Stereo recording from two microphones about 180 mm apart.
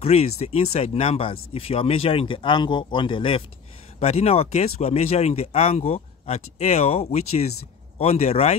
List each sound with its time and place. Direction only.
0.0 s speech: 35° left (ahead or behind)